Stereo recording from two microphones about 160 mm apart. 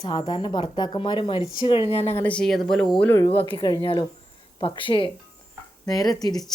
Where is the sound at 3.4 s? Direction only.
30° left (ahead or behind).